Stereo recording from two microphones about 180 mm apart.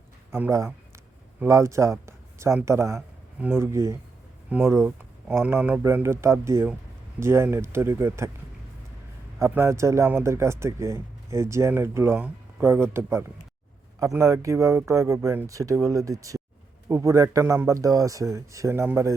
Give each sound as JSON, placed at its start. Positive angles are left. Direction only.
{"t": 0.3, "sound": "speech", "side_deg": -10}
{"t": 9.4, "sound": "speech", "side_deg": -15}